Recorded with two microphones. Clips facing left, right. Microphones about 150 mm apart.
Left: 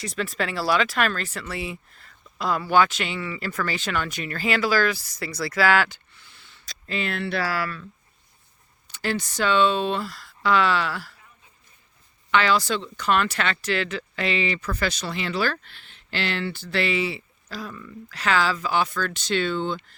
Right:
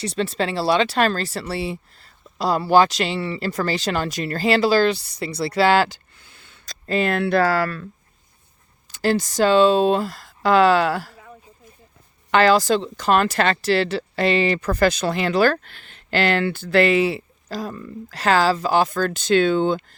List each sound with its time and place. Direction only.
0.2 s speech: 30° right (ahead or behind)
6.6 s speech: 45° right (ahead or behind)
8.9 s speech: 40° right (ahead or behind)
12.3 s speech: 40° right (ahead or behind)